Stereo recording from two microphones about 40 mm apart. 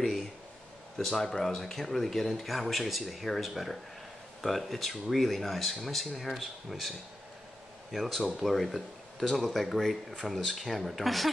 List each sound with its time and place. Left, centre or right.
1.0 s speech: centre